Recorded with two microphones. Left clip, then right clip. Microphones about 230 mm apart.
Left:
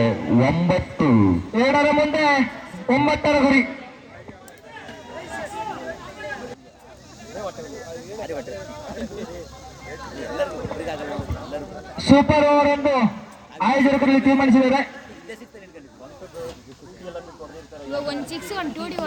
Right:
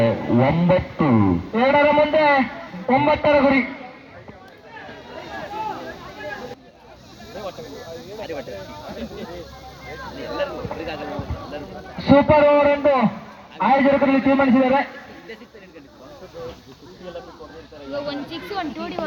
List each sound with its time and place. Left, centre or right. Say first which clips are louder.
0.0 s speech: right 1 dB; left
5.3 s a sound: right 2 dB; left
8.2 s a sound: even; left
9.9 s vehicle: right 1 dB; left
13.6 s speech: right 2 dB; left
17.9 s speech: left 1 dB; left